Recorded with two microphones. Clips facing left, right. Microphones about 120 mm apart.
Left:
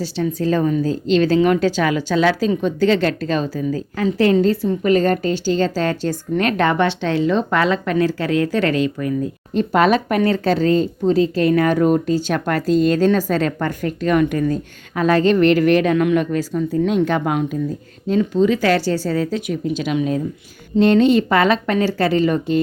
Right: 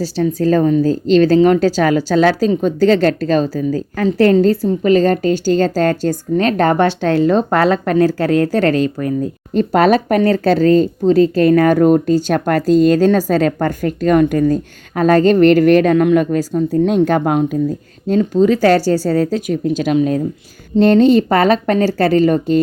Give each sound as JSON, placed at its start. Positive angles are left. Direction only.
{"t": 0.0, "sound": "a woman's voice", "side_deg": -40}